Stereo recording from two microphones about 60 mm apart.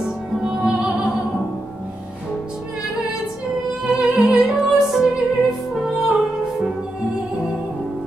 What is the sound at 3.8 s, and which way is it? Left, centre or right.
Music, centre.